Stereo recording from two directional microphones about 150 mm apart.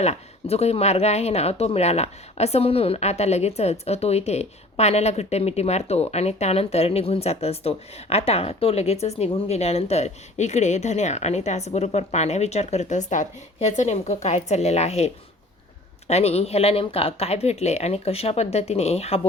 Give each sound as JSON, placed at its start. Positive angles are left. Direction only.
{"t": 0.0, "sound": "speech", "side_deg": 45}